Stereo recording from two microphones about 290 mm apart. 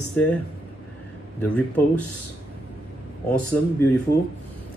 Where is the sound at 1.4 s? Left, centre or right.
Centre.